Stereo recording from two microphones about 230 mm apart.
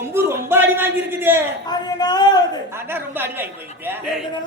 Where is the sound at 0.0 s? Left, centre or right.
Centre.